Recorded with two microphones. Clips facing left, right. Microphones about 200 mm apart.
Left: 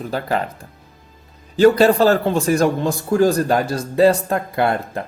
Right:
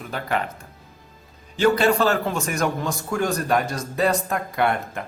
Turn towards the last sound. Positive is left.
turn(degrees=30)  # may be behind; listen again after turning